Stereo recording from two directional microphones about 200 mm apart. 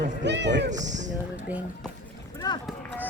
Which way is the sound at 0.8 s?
35° right (ahead or behind).